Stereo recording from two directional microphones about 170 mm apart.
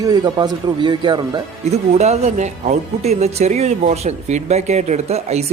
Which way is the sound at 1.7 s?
40° right (ahead or behind).